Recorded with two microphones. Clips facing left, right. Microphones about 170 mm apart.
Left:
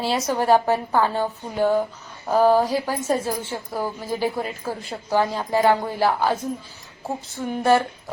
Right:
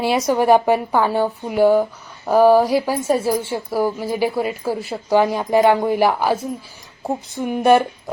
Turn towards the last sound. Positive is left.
turn(degrees=-15)  # may be behind; listen again after turning